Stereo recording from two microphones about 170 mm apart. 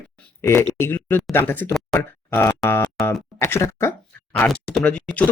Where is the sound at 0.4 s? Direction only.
15° left (ahead or behind).